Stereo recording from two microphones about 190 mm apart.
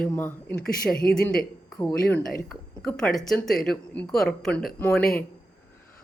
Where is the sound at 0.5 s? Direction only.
50° left (ahead or behind).